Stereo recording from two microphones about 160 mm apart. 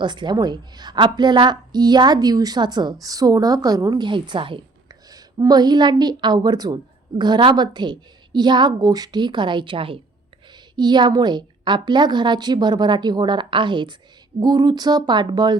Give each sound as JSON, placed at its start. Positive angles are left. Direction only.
{"t": 0.0, "sound": "a woman's voice", "side_deg": -30}